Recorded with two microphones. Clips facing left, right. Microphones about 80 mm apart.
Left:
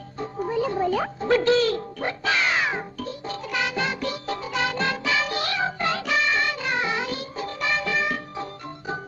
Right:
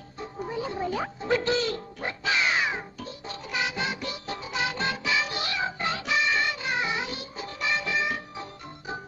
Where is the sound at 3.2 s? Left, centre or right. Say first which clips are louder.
Left 3 dB; left.